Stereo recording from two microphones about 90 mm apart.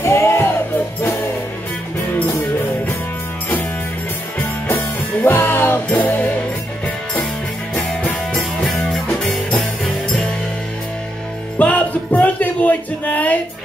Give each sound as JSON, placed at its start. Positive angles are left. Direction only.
{"t": 0.0, "sound": "music", "side_deg": 30}
{"t": 2.0, "sound": "music", "side_deg": 25}
{"t": 5.2, "sound": "music", "side_deg": 25}
{"t": 7.7, "sound": "music", "side_deg": 20}
{"t": 8.3, "sound": "music", "side_deg": 5}
{"t": 11.5, "sound": "music", "side_deg": 15}